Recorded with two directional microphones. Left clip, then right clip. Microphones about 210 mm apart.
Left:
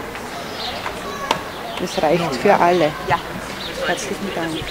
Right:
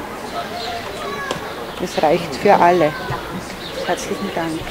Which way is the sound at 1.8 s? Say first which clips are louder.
Right 1 dB; centre (ahead or behind).